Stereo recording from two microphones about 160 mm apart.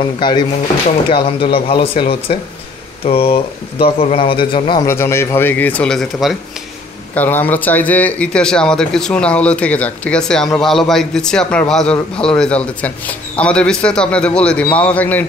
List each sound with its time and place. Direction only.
0.2 s speech: 30° left (ahead or behind)
4.8 s speech: 15° left (ahead or behind)